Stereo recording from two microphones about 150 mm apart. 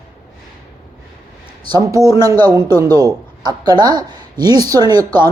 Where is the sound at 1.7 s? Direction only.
25° right (ahead or behind).